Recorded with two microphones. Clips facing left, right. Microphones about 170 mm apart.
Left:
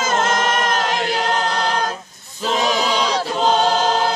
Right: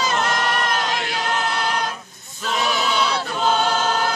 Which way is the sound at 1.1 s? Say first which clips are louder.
Left 4 dB; 30° left (ahead or behind).